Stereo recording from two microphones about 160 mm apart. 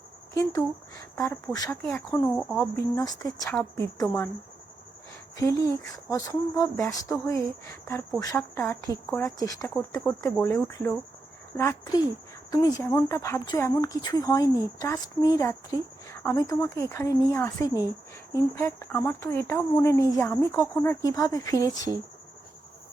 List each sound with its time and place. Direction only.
0.3 s a woman's voice: 20° left (ahead or behind)
2.3 s speech: centre (ahead or behind)
2.6 s a woman's voice: 20° left (ahead or behind)
5.4 s a woman's voice: 20° left (ahead or behind)